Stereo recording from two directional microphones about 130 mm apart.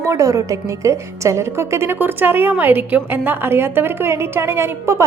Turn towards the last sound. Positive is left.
turn(degrees=-20)  # may be behind; listen again after turning